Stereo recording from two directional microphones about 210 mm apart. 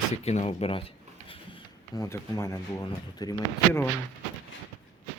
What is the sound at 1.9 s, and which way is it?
Speech, 15° left (ahead or behind).